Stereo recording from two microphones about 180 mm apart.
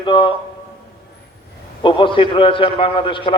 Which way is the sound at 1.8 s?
25° left (ahead or behind).